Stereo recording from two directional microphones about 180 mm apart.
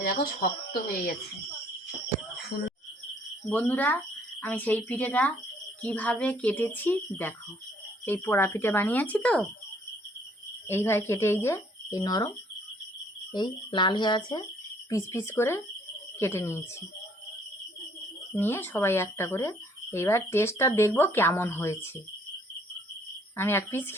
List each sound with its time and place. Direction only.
0.2 s speech: 50° left (ahead or behind)
3.5 s speech: 10° left (ahead or behind)
10.7 s speech: 15° left (ahead or behind)
13.3 s speech: 25° left (ahead or behind)
18.3 s speech: 10° left (ahead or behind)
23.4 s speech: 15° left (ahead or behind)